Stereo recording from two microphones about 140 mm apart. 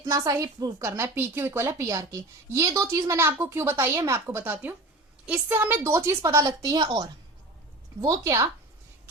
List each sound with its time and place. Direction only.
0.0 s a woman's voice: 25° right (ahead or behind)